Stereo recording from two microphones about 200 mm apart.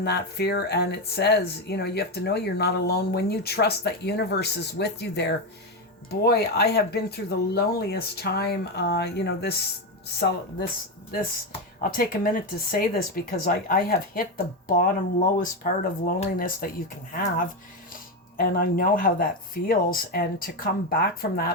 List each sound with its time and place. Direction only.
0.0 s speech: 55° left (ahead or behind)
11.8 s speech: 45° left (ahead or behind)